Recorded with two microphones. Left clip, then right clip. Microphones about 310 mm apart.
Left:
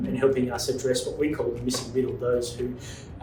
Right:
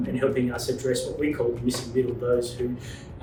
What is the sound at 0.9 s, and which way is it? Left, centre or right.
Speech, centre.